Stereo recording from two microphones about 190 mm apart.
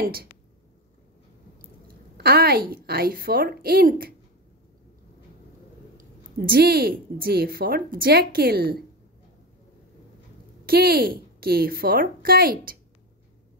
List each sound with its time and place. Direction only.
0.0 s a woman's voice: 50° right (ahead or behind)
2.1 s a woman's voice: 55° right (ahead or behind)
5.9 s a woman's voice: 50° right (ahead or behind)
10.6 s a woman's voice: 55° right (ahead or behind)